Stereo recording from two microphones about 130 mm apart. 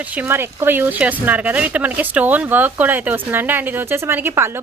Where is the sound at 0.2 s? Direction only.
15° right (ahead or behind).